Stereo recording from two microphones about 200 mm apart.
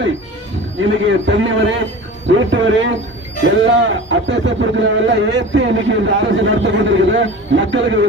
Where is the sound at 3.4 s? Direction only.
65° right (ahead or behind).